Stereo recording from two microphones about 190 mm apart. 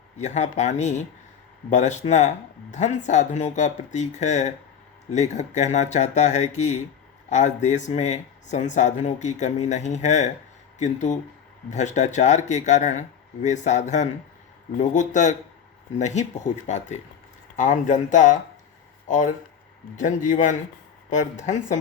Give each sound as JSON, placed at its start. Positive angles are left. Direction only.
{"t": 0.2, "sound": "speech", "side_deg": 40}